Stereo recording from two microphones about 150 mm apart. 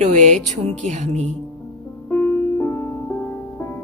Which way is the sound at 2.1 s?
15° left (ahead or behind).